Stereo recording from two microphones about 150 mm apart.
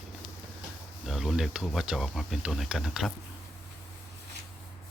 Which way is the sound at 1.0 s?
Centre (ahead or behind).